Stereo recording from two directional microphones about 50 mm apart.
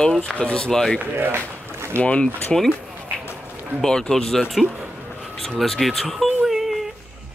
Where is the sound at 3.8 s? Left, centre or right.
Centre.